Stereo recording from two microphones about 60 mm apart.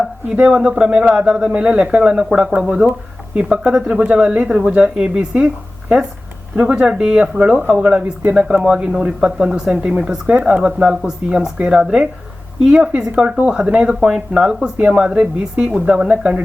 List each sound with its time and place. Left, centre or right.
0.0 s speech: centre
6.6 s speech: centre
12.5 s speech: centre